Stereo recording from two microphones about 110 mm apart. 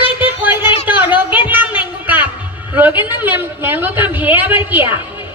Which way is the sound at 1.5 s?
15° right (ahead or behind).